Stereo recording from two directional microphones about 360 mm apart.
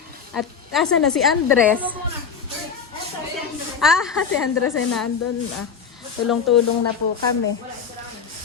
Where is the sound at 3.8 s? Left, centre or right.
Centre.